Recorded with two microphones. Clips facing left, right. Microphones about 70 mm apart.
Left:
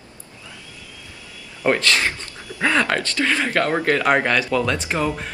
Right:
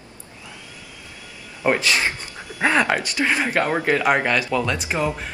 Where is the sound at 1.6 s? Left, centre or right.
Centre.